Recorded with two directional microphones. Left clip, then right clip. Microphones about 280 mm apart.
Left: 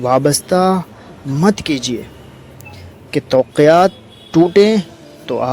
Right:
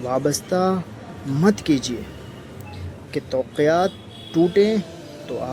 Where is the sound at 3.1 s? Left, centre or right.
Left.